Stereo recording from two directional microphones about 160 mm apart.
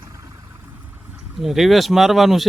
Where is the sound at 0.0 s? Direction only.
20° right (ahead or behind).